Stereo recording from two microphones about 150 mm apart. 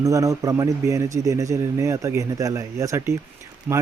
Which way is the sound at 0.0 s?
20° right (ahead or behind).